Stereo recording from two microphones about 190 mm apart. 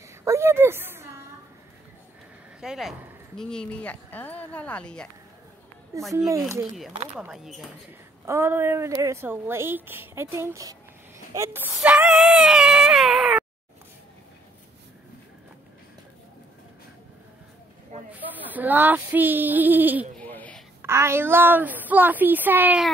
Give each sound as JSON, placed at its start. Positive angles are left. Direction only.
{"t": 0.2, "sound": "a woman's voice", "side_deg": -15}
{"t": 2.6, "sound": "speech", "side_deg": -5}
{"t": 6.1, "sound": "a woman's voice", "side_deg": -15}
{"t": 7.2, "sound": "speech", "side_deg": -5}
{"t": 8.3, "sound": "a woman's voice", "side_deg": -10}
{"t": 11.3, "sound": "a sound", "side_deg": -15}
{"t": 18.1, "sound": "female singing", "side_deg": -10}
{"t": 20.2, "sound": "a sound", "side_deg": 10}
{"t": 20.8, "sound": "a woman's voice", "side_deg": -15}